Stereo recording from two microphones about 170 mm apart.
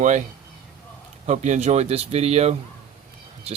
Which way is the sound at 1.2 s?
45° right (ahead or behind).